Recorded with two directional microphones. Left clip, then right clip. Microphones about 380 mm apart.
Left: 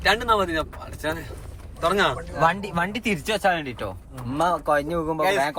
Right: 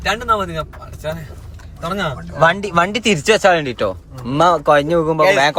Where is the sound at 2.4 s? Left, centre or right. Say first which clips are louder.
Right 9 dB; right.